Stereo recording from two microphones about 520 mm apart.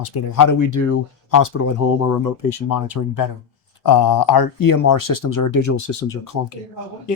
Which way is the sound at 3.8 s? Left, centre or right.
Left.